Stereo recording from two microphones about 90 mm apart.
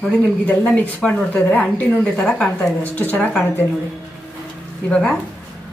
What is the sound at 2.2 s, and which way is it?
A woman's voice, 10° left (ahead or behind).